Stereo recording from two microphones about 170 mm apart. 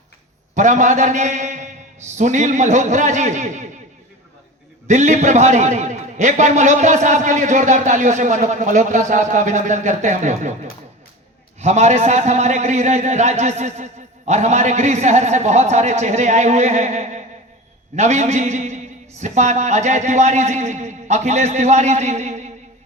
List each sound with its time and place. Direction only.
0.5 s a man's voice: 50° right (ahead or behind)
4.9 s a man's voice: 45° right (ahead or behind)